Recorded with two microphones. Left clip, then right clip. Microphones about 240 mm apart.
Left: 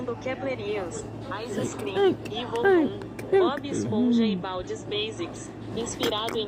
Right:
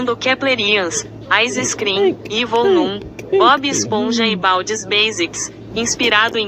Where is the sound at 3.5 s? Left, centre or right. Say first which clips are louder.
Right 11 dB; right.